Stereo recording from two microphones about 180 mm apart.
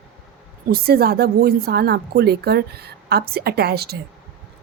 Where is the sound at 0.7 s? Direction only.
60° right (ahead or behind).